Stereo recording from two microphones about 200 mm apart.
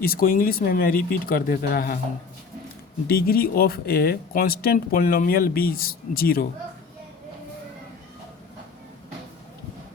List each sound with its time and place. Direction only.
0.0 s speech: 45° left (ahead or behind)
3.1 s speech: 50° left (ahead or behind)